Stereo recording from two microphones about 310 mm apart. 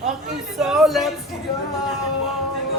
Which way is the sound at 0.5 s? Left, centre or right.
Centre.